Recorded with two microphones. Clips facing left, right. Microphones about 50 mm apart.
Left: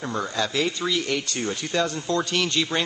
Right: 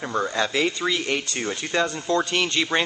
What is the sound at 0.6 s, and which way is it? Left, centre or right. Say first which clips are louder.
Speech: even; centre.